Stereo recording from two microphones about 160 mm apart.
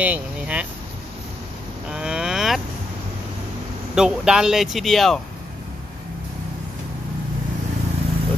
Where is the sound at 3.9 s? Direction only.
5° right (ahead or behind).